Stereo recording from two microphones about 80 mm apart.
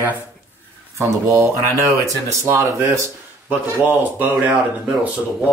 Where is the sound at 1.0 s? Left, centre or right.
Right.